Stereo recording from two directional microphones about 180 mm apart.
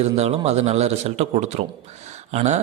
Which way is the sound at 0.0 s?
35° right (ahead or behind).